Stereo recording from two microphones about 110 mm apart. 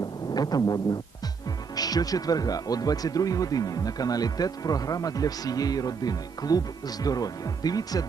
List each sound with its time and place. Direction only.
0.3 s speech: 35° left (ahead or behind)